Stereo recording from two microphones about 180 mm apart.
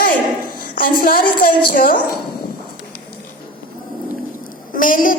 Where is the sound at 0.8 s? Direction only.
55° left (ahead or behind).